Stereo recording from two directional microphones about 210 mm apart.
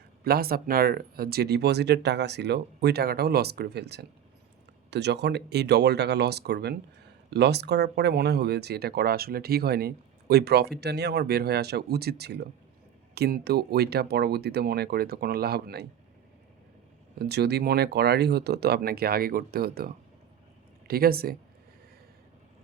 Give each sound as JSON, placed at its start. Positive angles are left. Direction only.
{"t": 0.3, "sound": "speech", "side_deg": -45}
{"t": 17.2, "sound": "speech", "side_deg": -50}